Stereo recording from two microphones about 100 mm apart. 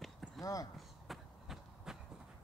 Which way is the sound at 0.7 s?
Centre (ahead or behind).